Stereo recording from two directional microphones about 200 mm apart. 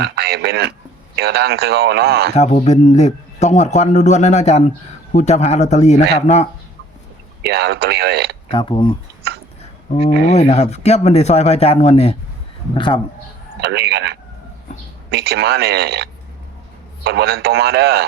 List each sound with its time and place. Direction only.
0.0 s a sound: 55° right (ahead or behind)
1.1 s a man's voice: 55° right (ahead or behind)
2.3 s a man's voice: 35° left (ahead or behind)
7.4 s a man's voice: 55° right (ahead or behind)
8.4 s speech: 25° left (ahead or behind)
10.3 s a man's voice: 35° left (ahead or behind)
13.6 s a man's voice: 55° right (ahead or behind)